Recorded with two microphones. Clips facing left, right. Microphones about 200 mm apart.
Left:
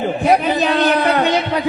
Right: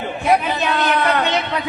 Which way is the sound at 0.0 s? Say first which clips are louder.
Left 3 dB; 35° left (ahead or behind).